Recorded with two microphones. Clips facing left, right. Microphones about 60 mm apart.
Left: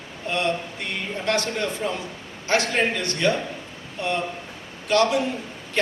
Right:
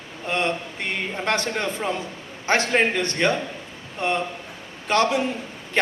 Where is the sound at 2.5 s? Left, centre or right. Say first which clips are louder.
Right 2 dB; right.